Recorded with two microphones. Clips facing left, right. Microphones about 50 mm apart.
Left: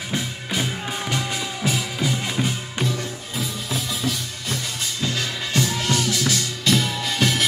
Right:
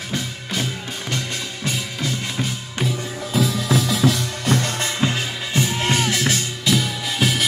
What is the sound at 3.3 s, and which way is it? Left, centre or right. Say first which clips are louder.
Music: right 9 dB; right.